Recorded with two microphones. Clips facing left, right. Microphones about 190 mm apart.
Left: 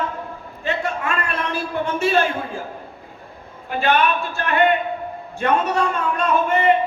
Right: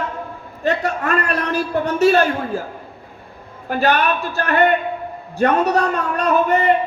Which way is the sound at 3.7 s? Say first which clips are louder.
Right 1 dB; 40° right (ahead or behind).